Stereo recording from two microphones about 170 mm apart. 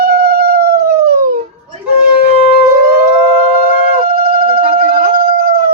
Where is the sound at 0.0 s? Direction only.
65° right (ahead or behind).